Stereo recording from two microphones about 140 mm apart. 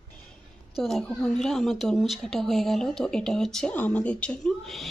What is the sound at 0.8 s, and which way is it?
A woman's voice, 5° left (ahead or behind).